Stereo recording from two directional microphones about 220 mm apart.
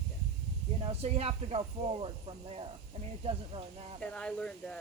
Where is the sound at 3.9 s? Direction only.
5° left (ahead or behind).